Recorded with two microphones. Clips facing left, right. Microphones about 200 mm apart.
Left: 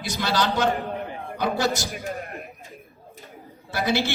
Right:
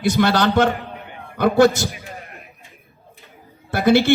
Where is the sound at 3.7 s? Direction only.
55° right (ahead or behind).